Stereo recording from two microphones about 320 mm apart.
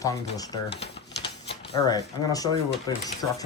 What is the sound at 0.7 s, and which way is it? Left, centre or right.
Typewriter, left.